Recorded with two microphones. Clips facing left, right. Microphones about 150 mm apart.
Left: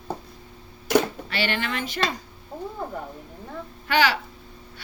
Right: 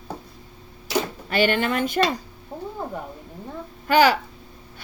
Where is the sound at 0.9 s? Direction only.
55° left (ahead or behind).